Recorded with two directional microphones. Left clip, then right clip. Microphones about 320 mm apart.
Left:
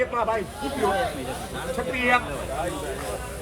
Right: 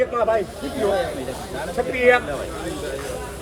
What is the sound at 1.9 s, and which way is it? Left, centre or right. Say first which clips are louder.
Speech: right 5 dB; centre.